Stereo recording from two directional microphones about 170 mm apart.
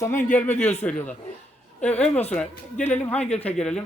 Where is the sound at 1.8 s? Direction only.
10° left (ahead or behind).